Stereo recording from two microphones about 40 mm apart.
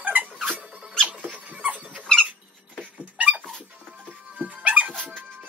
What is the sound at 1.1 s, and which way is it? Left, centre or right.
Rodents, right.